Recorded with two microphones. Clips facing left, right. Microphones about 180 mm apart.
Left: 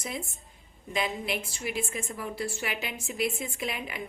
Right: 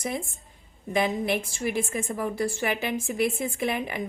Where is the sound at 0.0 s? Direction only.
50° right (ahead or behind).